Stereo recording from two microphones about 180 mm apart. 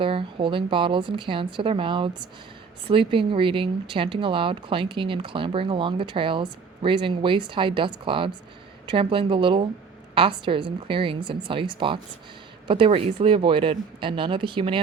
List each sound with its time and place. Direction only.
0.0 s speech: 30° right (ahead or behind)